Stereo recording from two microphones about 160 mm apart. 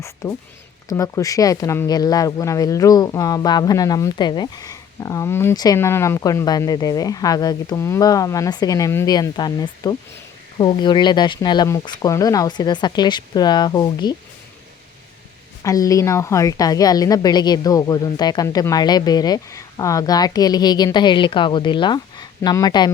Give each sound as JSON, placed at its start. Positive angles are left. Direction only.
{"t": 0.0, "sound": "speech", "side_deg": 20}
{"t": 15.6, "sound": "speech", "side_deg": 20}